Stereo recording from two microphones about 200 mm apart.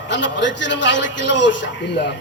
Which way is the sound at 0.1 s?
65° left (ahead or behind).